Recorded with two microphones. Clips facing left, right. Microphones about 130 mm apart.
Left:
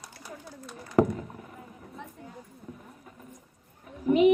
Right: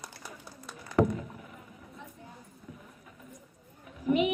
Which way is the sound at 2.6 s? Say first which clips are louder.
Left 3 dB; 40° left (ahead or behind).